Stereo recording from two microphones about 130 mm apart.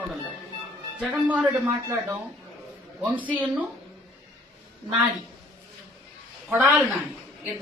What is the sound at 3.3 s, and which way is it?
Speech, 15° right (ahead or behind).